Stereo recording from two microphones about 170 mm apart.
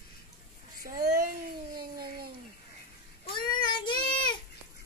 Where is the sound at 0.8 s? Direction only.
60° right (ahead or behind).